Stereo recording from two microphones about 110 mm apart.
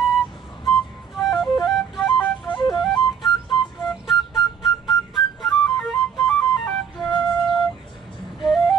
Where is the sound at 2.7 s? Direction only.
45° left (ahead or behind).